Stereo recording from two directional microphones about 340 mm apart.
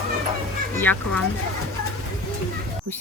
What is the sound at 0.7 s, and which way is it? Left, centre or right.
Speech, centre.